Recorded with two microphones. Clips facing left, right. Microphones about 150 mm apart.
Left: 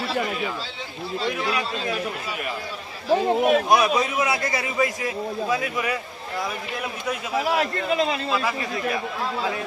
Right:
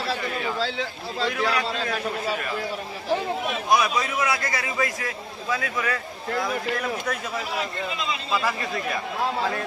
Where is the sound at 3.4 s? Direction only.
55° left (ahead or behind).